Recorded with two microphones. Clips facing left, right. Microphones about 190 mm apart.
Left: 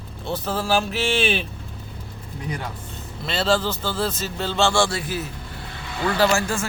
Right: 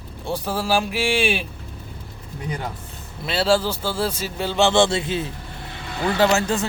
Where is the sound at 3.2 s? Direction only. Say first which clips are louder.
Right 2 dB; 10° right (ahead or behind).